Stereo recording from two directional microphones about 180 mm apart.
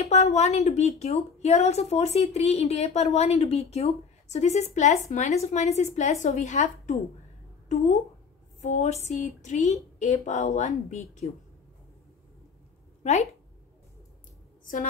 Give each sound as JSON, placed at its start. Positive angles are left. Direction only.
{"t": 0.0, "sound": "a woman's voice", "side_deg": 35}
{"t": 8.5, "sound": "a woman's voice", "side_deg": 40}
{"t": 13.0, "sound": "speech", "side_deg": 40}